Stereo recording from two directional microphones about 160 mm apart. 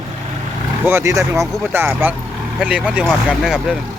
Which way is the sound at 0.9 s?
15° right (ahead or behind).